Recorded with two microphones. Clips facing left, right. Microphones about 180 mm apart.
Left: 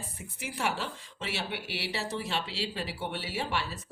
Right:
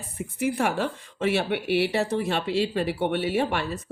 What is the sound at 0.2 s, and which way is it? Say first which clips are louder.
Speech: right 10 dB; 55° right (ahead or behind).